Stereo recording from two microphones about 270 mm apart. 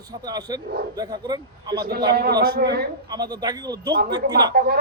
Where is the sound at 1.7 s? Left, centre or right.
Right.